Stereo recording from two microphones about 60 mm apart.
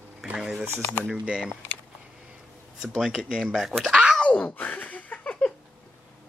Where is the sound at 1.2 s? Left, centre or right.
Centre.